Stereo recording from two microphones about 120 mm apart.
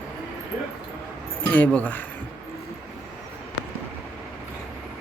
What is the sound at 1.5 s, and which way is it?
Speech, 10° left (ahead or behind).